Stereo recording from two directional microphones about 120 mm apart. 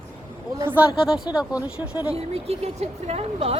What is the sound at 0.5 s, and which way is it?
Speech, 15° right (ahead or behind).